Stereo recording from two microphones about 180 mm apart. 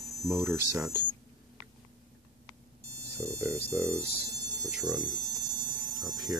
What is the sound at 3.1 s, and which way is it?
Speech, 15° right (ahead or behind).